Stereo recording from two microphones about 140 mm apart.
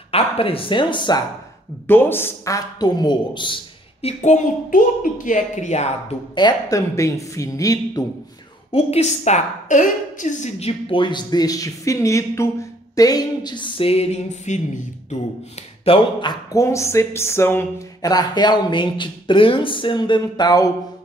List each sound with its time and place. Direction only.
0.1 s a woman's voice: 40° left (ahead or behind)
1.9 s a man's voice: 15° left (ahead or behind); by 4.1 s 35° left (ahead or behind)
4.2 s speech: 65° left (ahead or behind)
6.3 s a man's voice: 30° left (ahead or behind)
8.7 s a woman's voice: 50° left (ahead or behind)
15.8 s a woman's voice: 40° left (ahead or behind)